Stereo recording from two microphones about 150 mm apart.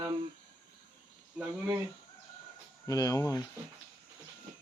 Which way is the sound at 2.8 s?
20° left (ahead or behind).